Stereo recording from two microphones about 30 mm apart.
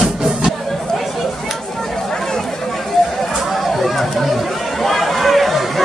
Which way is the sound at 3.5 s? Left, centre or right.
Centre.